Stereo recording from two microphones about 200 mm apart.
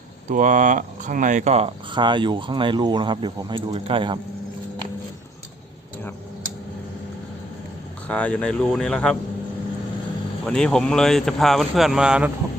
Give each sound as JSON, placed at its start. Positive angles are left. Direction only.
{"t": 0.3, "sound": "speech", "side_deg": -40}
{"t": 8.0, "sound": "speech", "side_deg": 5}
{"t": 10.4, "sound": "speech", "side_deg": 5}